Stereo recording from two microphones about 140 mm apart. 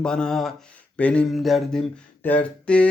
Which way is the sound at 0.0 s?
5° left (ahead or behind).